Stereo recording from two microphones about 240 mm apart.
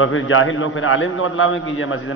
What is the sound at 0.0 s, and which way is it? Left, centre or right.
A man's voice, left.